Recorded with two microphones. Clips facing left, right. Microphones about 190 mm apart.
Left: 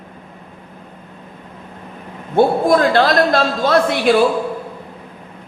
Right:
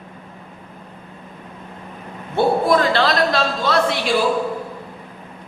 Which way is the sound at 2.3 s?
45° left (ahead or behind).